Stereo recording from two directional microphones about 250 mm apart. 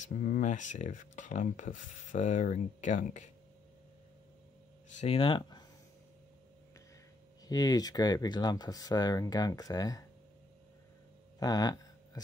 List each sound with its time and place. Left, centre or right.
0.0 s speech: left
5.0 s speech: left
7.4 s speech: centre
11.3 s a sound: centre